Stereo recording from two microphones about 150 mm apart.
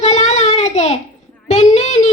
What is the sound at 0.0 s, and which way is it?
Child singing, 50° left (ahead or behind).